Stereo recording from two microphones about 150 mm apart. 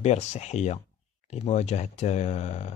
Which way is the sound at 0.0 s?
50° left (ahead or behind).